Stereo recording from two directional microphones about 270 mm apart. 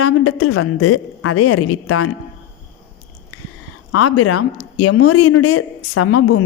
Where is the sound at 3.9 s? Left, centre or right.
Left.